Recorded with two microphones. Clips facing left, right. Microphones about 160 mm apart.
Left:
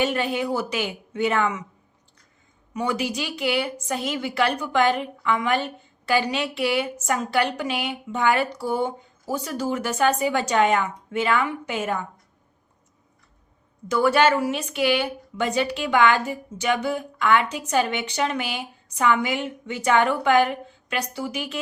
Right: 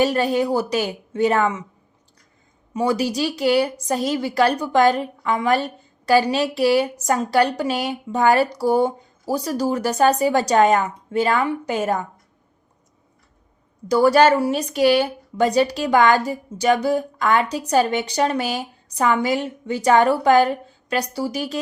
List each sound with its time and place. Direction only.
0.0 s a woman's voice: 40° right (ahead or behind)
2.7 s a woman's voice: 35° right (ahead or behind)
13.8 s a woman's voice: 35° right (ahead or behind)